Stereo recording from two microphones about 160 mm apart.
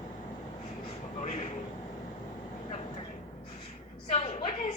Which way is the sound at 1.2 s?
45° left (ahead or behind).